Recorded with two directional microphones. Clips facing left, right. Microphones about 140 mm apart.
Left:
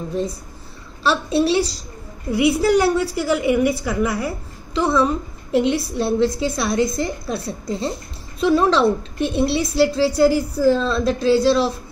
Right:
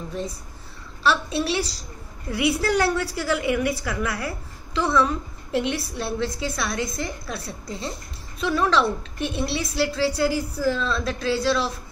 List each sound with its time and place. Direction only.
1.0 s a woman's voice: 25° left (ahead or behind)